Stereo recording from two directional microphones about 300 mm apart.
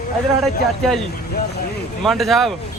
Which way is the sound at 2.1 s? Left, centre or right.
Centre.